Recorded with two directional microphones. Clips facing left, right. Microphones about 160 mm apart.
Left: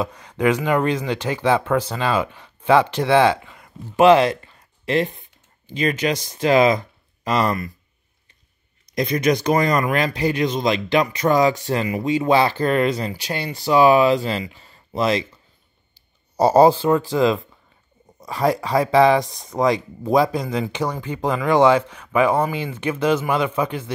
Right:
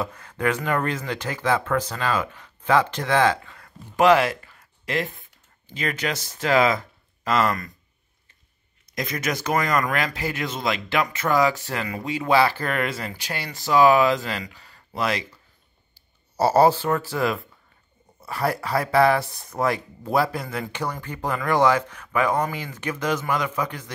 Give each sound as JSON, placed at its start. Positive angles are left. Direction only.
{"t": 0.0, "sound": "speech", "side_deg": 15}
{"t": 8.9, "sound": "speech", "side_deg": 25}
{"t": 16.3, "sound": "speech", "side_deg": 15}